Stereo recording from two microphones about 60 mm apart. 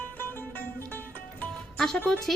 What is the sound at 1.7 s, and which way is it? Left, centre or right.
Music, centre.